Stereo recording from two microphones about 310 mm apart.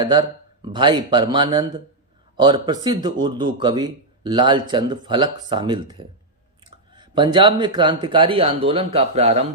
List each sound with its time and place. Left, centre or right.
0.0 s speech: centre